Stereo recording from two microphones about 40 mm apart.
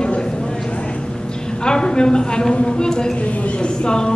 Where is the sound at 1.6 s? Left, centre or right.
Left.